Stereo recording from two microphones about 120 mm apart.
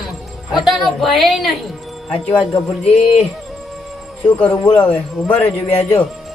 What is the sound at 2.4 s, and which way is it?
Music, 45° left (ahead or behind).